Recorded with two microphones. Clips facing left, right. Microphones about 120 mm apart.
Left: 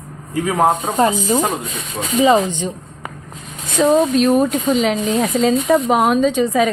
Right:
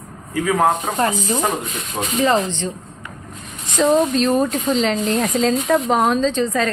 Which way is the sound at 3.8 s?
5° left (ahead or behind).